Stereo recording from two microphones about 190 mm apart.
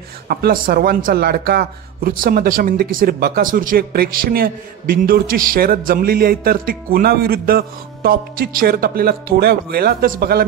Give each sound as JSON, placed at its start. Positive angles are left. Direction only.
{"t": 0.3, "sound": "speech", "side_deg": -50}